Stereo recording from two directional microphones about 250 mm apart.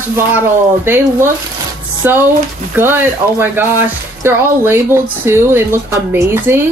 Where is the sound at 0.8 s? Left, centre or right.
Centre.